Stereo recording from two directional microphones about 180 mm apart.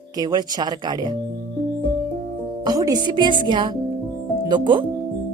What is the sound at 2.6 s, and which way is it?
Speech, 20° right (ahead or behind).